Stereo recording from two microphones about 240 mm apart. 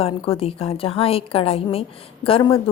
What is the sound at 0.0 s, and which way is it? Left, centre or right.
A woman's voice, left.